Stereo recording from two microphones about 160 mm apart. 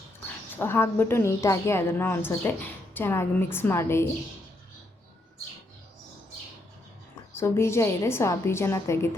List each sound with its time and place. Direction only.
0.5 s a woman's voice: 15° left (ahead or behind)
7.3 s a woman's voice: 15° left (ahead or behind)